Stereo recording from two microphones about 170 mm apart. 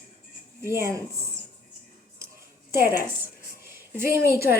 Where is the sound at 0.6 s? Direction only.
15° right (ahead or behind).